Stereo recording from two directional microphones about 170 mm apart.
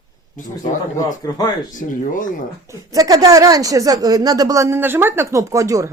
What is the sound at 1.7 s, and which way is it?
Speech, 50° left (ahead or behind).